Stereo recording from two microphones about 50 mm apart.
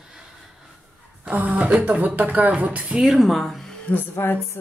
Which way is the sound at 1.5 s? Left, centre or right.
Right.